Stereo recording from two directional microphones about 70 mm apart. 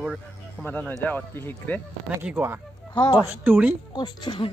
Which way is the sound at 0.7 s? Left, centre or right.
Left.